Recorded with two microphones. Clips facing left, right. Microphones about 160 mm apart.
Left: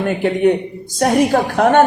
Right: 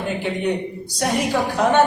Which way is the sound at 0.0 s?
60° left (ahead or behind).